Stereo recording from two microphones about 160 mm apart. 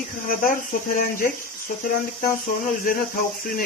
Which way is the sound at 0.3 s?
60° left (ahead or behind).